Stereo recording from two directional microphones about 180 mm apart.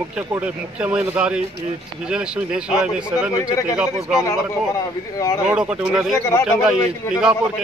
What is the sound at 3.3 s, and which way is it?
Speech, 20° left (ahead or behind).